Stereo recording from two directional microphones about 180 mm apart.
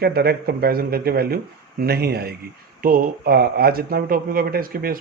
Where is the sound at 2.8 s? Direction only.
55° right (ahead or behind).